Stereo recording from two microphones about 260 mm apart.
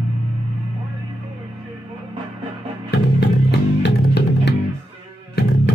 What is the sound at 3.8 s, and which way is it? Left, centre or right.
Music, left.